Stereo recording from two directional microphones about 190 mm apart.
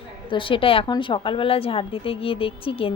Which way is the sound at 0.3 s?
25° left (ahead or behind).